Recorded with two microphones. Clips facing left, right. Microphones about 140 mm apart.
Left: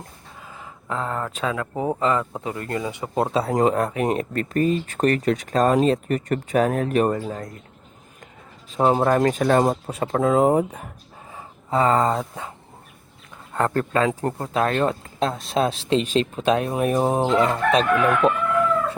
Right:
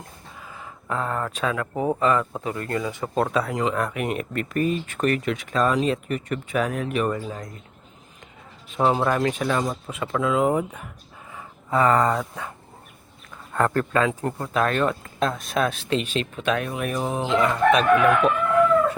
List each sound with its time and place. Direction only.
0.5 s speech: 20° left (ahead or behind)
3.2 s speech: 30° left (ahead or behind)
3.5 s speech: 45° left (ahead or behind)
8.7 s speech: 35° left (ahead or behind)